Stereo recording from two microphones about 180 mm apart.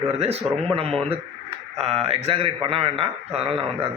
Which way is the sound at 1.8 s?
35° right (ahead or behind).